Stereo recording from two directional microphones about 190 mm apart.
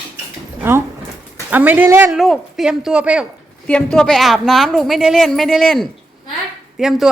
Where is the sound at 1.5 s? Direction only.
10° right (ahead or behind).